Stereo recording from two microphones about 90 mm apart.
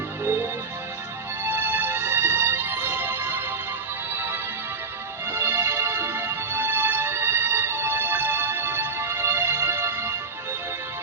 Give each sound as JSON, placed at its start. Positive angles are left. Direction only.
{"t": 1.5, "sound": "music", "side_deg": -25}